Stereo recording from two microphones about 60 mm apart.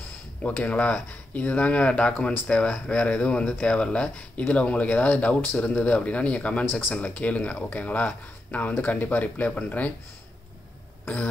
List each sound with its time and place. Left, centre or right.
0.4 s speech: left
6.7 s speech: left